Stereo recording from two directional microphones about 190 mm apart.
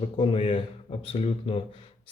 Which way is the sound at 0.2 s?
30° left (ahead or behind).